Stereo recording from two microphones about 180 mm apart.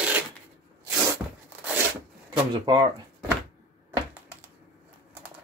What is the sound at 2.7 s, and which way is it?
Speech, 25° right (ahead or behind).